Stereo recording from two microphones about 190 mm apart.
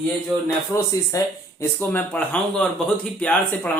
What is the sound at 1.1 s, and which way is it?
Speech, 20° left (ahead or behind).